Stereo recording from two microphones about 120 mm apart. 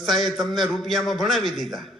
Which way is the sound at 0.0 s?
Centre (ahead or behind).